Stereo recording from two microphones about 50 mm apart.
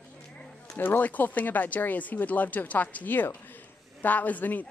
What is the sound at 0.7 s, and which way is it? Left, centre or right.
Speech, left.